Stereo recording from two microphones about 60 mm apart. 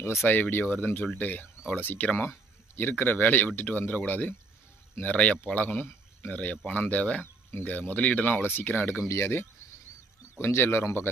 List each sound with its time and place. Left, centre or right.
0.3 s speech: left
9.0 s speech: left